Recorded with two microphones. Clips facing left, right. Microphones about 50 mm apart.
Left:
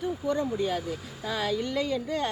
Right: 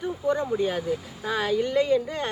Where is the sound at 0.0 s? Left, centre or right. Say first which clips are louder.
Right 2 dB; centre.